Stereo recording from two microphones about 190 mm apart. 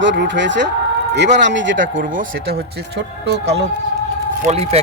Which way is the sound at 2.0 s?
45° right (ahead or behind).